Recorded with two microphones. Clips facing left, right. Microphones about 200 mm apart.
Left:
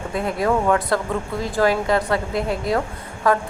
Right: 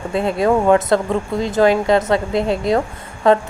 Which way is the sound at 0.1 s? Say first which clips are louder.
Right 5 dB; 25° right (ahead or behind).